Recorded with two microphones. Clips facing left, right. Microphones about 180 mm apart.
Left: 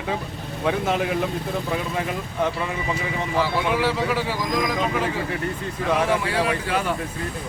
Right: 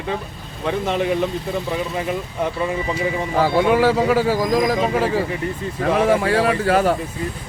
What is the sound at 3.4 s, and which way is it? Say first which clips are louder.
Speech: right 7 dB; 45° right (ahead or behind).